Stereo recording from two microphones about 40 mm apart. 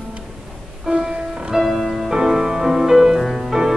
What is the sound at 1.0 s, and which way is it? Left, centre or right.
Music, centre.